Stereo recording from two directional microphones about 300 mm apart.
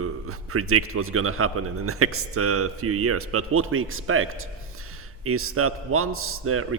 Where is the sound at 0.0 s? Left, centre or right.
Right.